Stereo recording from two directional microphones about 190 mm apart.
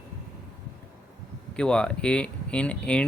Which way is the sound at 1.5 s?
5° left (ahead or behind).